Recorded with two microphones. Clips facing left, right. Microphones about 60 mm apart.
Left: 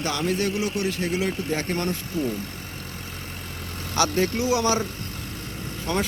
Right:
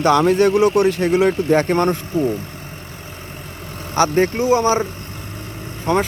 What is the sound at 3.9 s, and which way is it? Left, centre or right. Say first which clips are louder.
Speech: right 7 dB; right.